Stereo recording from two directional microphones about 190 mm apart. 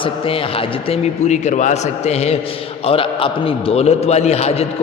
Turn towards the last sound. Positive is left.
turn(degrees=35)  # may be behind; listen again after turning